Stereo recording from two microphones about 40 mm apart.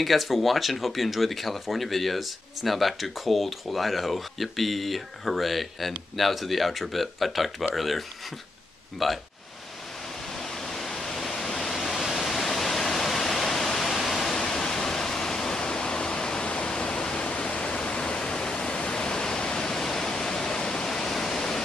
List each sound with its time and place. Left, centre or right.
0.0 s speech: centre
9.0 s speech: centre
10.3 s pink noise: centre
11.9 s waterfall: centre
12.2 s pink noise: centre